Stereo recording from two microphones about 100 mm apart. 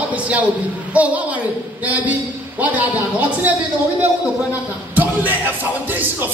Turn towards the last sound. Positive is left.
turn(degrees=-20)  # may be behind; listen again after turning